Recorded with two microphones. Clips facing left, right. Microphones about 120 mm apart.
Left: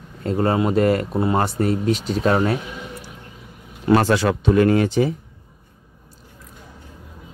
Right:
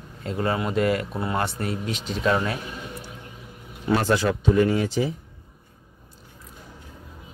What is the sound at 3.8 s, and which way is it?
Speech, 80° left.